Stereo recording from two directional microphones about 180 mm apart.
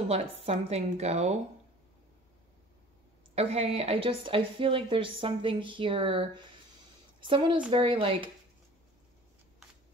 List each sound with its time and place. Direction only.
0.1 s a woman's voice: 35° right (ahead or behind)
3.3 s a woman's voice: 35° right (ahead or behind)